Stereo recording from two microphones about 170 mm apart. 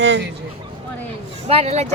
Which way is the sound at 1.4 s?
35° right (ahead or behind).